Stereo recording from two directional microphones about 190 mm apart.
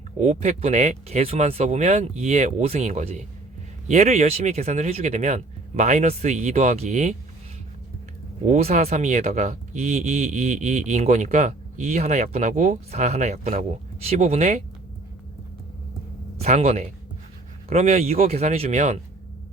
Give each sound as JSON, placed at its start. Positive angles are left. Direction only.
{"t": 0.2, "sound": "speech", "side_deg": -40}
{"t": 8.4, "sound": "speech", "side_deg": -35}
{"t": 16.4, "sound": "speech", "side_deg": -35}